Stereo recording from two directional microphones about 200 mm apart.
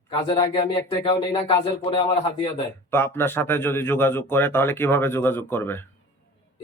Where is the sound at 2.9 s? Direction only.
10° left (ahead or behind).